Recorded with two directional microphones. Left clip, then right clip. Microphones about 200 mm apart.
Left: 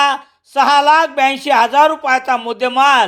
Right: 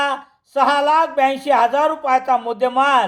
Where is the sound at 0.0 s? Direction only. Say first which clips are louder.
Left 6 dB; 20° left (ahead or behind).